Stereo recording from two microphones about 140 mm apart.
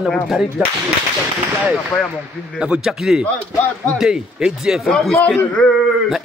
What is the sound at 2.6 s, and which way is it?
Speech, 5° right (ahead or behind).